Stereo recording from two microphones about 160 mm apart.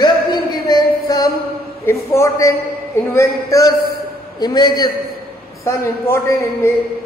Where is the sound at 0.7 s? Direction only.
25° left (ahead or behind).